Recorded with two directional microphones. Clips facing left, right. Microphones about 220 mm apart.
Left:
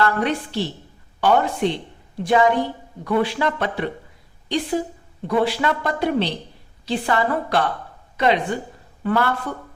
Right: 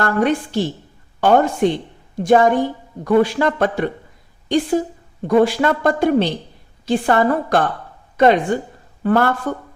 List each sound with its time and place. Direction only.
0.0 s a woman's voice: 45° right (ahead or behind)